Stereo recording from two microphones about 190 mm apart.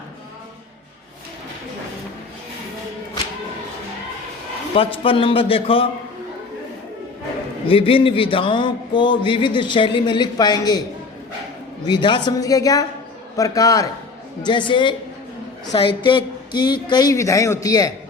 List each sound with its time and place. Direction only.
4.7 s speech: 30° left (ahead or behind)
7.7 s speech: 30° left (ahead or behind)
11.9 s a man's voice: 25° left (ahead or behind)